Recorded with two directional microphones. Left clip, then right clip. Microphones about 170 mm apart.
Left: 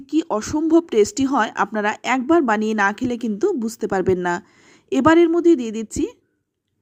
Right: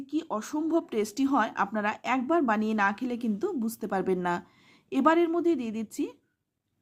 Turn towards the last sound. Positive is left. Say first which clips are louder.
# left 9 dB
turn(degrees=30)  # may be behind; listen again after turning